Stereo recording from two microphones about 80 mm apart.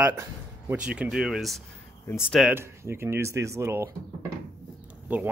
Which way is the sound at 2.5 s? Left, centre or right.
Right.